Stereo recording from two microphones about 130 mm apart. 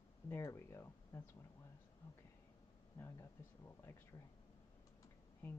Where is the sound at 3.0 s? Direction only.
20° left (ahead or behind).